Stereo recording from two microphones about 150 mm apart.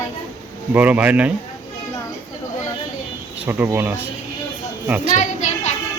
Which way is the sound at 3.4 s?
15° right (ahead or behind).